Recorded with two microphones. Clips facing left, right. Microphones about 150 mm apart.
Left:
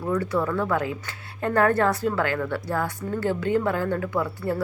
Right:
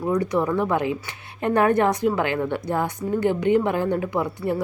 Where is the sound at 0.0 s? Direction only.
15° right (ahead or behind).